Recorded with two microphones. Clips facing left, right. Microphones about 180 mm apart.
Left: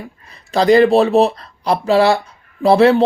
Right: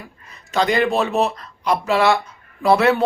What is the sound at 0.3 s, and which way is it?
Speech, 35° left (ahead or behind).